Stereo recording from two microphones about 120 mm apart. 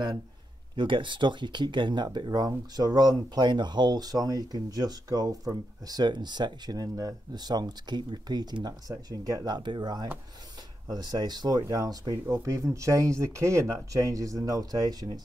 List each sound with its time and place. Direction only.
0.7 s speech: 45° right (ahead or behind)